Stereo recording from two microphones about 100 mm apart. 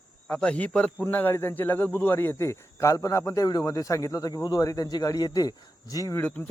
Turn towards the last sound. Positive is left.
turn(degrees=35)  # may be behind; listen again after turning